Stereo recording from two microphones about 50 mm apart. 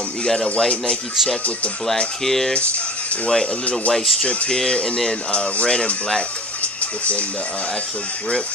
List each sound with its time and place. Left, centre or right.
0.2 s speech: centre
2.0 s speech: centre
3.9 s speech: centre; by 7.2 s left